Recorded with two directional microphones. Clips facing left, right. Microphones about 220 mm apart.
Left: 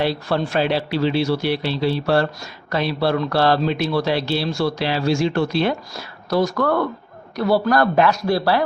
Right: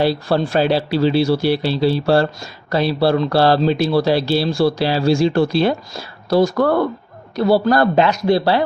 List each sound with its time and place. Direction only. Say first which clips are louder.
0.0 s speech: right 4 dB; 35° right (ahead or behind)